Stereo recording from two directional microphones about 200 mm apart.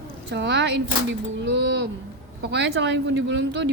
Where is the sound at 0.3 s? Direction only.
55° right (ahead or behind).